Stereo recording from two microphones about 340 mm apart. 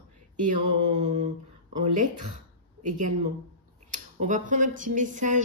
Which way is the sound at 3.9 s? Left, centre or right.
Right.